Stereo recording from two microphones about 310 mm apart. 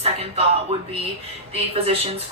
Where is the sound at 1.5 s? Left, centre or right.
Centre.